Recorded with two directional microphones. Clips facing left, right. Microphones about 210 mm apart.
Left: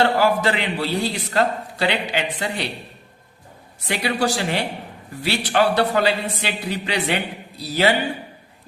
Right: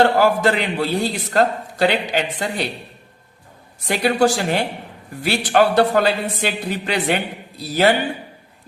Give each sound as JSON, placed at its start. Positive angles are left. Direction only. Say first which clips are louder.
{"t": 0.0, "sound": "a man's voice", "louder": "right 3 dB", "side_deg": -45}
{"t": 3.8, "sound": "a man's voice", "louder": "right 5 dB", "side_deg": -45}